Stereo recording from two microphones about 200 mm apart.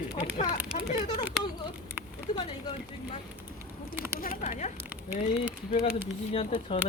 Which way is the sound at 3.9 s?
10° right (ahead or behind).